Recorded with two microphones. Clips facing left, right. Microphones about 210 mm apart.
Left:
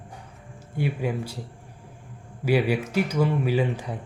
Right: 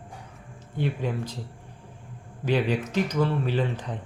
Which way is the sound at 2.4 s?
10° left (ahead or behind).